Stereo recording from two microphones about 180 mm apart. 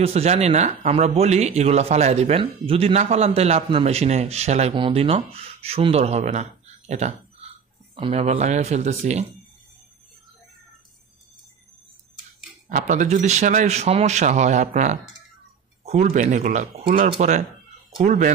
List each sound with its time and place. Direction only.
0.0 s speech: 35° right (ahead or behind)
6.9 s a sound: 40° right (ahead or behind)
7.9 s speech: 30° right (ahead or behind)
12.6 s speech: 45° right (ahead or behind)
15.8 s a sound: 35° right (ahead or behind)
16.1 s speech: 45° right (ahead or behind)